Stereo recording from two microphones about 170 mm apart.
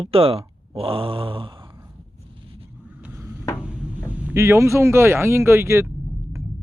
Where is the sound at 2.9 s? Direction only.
10° right (ahead or behind).